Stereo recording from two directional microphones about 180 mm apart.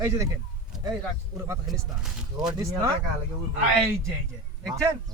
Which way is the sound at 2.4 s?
20° right (ahead or behind).